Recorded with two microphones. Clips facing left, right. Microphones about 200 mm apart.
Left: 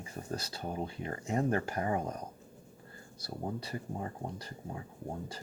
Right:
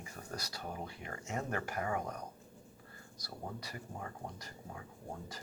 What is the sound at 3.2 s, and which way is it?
Speech, 25° left (ahead or behind).